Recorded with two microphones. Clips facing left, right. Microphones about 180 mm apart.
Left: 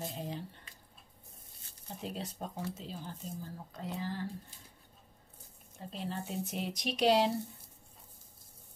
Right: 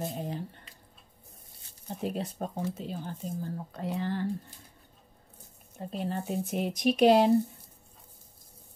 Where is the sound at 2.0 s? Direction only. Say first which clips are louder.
Right 7 dB; 55° right (ahead or behind).